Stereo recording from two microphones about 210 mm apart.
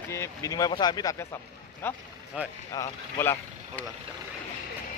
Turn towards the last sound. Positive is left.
turn(degrees=10)  # may be behind; listen again after turning